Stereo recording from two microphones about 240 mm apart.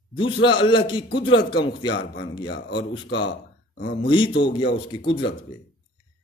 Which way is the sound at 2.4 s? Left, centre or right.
Left.